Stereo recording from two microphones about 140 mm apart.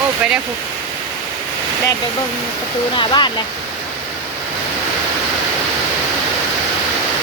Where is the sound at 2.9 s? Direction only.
35° left (ahead or behind).